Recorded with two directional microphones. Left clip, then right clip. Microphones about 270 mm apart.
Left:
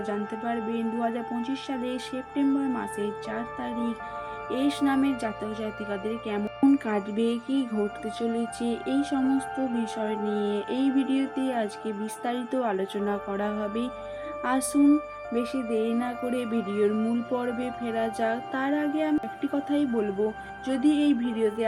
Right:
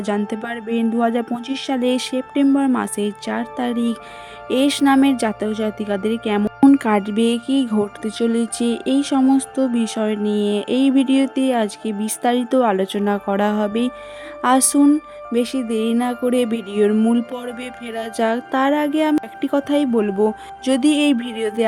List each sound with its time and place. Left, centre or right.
0.0 s speech: right